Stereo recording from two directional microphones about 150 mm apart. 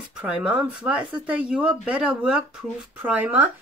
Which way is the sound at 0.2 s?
5° right (ahead or behind).